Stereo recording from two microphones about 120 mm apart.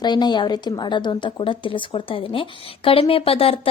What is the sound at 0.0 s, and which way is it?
A woman's voice, 35° left (ahead or behind).